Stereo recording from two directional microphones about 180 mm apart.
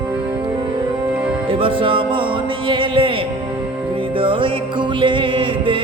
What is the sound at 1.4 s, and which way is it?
Music, 30° right (ahead or behind).